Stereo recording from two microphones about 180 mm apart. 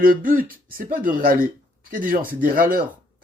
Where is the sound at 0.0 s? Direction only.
50° right (ahead or behind).